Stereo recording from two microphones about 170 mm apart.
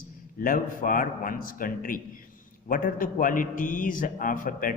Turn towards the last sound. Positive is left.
turn(degrees=50)  # may be behind; listen again after turning